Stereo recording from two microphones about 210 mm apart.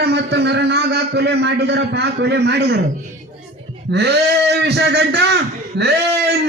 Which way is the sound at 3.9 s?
55° right (ahead or behind).